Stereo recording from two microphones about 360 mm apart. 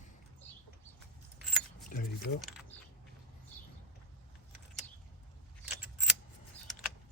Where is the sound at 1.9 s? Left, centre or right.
Left.